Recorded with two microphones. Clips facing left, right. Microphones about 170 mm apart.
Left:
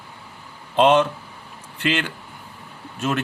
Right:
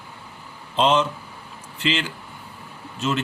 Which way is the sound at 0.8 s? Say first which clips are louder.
Left 4 dB; 60° left (ahead or behind).